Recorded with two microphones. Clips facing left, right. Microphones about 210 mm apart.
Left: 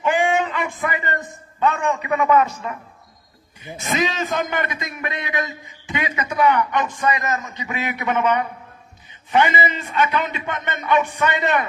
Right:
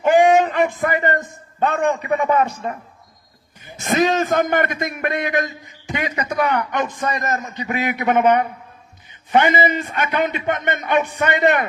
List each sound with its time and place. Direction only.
0.0 s a sound: 40° right (ahead or behind)
1.8 s speech: 35° right (ahead or behind)
3.6 s a man's voice: 45° right (ahead or behind)
7.4 s a man's voice: 35° right (ahead or behind)